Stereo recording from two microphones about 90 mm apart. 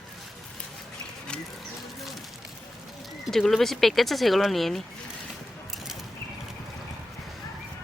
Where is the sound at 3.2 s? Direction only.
Centre (ahead or behind).